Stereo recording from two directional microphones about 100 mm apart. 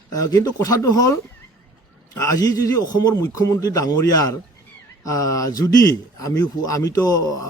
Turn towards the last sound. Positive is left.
turn(degrees=40)  # may be behind; listen again after turning